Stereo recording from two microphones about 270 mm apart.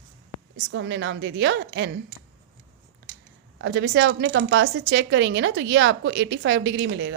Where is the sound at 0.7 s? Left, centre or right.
Right.